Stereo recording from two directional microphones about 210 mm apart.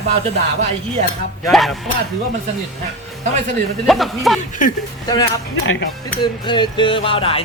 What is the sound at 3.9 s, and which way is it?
Speech, centre (ahead or behind).